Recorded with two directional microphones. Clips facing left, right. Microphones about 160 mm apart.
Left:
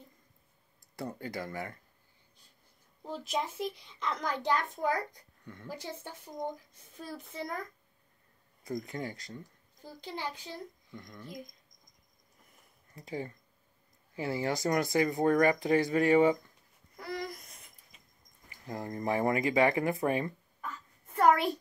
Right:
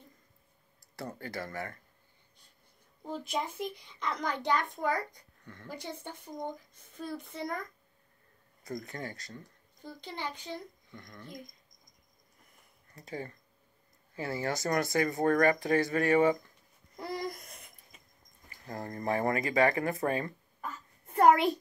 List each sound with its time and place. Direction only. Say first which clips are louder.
0.9 s speech: left 1 dB; 15° left (ahead or behind)
3.0 s a child's voice: even; centre (ahead or behind)
8.6 s speech: left 2 dB; 20° left (ahead or behind)
9.8 s a child's voice: even; 5° left (ahead or behind)
12.9 s speech: left 2 dB; 15° left (ahead or behind)
16.9 s a sound: right 2 dB; 30° right (ahead or behind)
18.5 s speech: left 1 dB; 15° left (ahead or behind)